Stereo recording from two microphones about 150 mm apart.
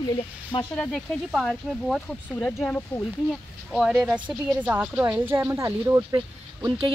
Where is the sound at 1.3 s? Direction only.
Centre (ahead or behind).